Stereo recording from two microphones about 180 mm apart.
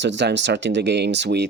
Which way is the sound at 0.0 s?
80° right.